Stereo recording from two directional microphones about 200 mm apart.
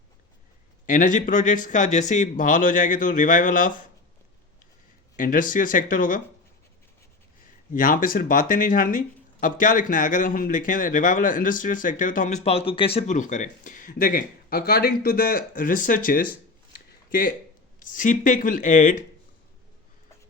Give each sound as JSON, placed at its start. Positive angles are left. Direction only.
{"t": 0.9, "sound": "speech", "side_deg": 40}
{"t": 5.1, "sound": "speech", "side_deg": 40}
{"t": 7.7, "sound": "speech", "side_deg": 45}